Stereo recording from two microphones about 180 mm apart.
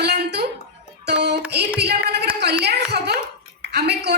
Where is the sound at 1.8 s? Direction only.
65° right (ahead or behind).